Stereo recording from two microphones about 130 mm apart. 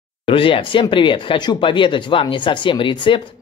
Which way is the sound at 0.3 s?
40° left (ahead or behind).